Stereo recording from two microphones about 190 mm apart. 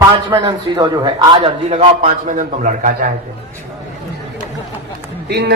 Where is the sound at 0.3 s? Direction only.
25° right (ahead or behind); by 3.1 s 45° right (ahead or behind).